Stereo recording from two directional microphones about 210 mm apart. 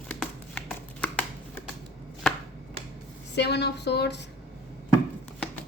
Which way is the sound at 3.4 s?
55° left (ahead or behind).